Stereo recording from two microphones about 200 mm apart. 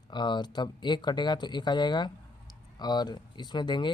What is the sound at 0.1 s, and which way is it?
Speech, 20° left (ahead or behind).